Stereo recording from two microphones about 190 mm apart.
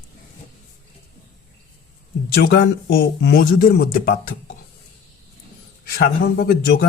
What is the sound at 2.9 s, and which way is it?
Speech, 60° left (ahead or behind).